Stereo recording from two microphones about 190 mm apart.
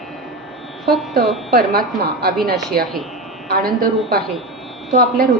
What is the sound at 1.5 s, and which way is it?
Speech, 55° right (ahead or behind).